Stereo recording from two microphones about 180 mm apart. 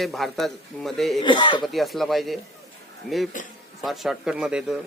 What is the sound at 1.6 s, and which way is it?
Speech, centre (ahead or behind).